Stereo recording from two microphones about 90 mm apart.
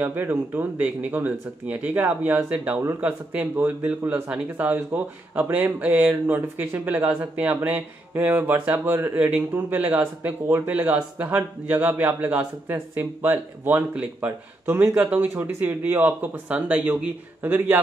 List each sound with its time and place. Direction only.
0.0 s a man's voice: 20° right (ahead or behind)